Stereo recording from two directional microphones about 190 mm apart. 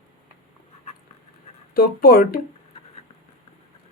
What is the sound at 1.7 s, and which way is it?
Speech, 50° left (ahead or behind).